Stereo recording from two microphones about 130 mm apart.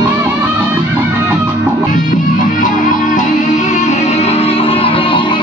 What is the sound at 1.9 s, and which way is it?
Music, 90° left.